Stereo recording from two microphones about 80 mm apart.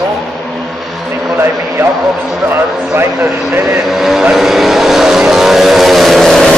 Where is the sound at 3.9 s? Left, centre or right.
Centre.